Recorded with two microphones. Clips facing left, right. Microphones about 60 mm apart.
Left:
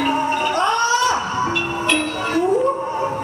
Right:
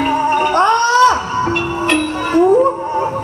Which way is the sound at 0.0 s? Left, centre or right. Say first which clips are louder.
Right 5 dB; right.